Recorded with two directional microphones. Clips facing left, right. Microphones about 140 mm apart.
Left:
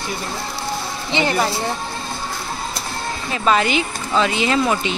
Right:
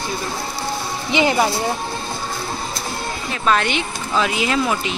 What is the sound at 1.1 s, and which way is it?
Speech, 15° right (ahead or behind).